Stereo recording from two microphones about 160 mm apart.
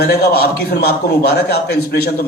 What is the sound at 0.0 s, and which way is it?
A man's voice, 85° left.